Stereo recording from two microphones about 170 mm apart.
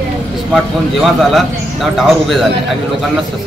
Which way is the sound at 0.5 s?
Centre (ahead or behind).